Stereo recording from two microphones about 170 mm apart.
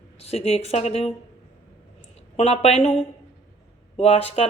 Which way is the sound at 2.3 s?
35° left (ahead or behind).